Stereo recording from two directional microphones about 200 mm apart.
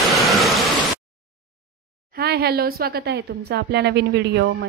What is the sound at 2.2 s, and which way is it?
Speech, 50° right (ahead or behind).